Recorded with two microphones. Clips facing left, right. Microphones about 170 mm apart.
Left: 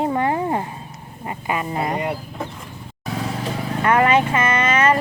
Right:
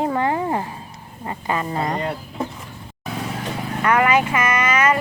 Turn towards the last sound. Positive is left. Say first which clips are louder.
# left 1 dB
turn(degrees=30)  # may be behind; listen again after turning